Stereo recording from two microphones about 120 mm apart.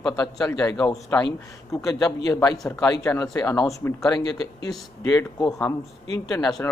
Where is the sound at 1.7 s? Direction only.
30° left (ahead or behind).